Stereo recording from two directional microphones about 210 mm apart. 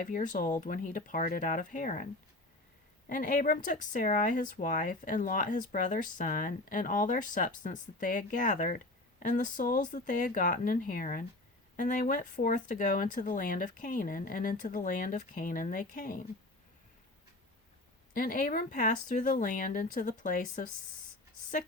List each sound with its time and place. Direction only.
0.0 s speech: 40° left (ahead or behind)
3.1 s speech: 40° left (ahead or behind)
18.1 s speech: 40° left (ahead or behind)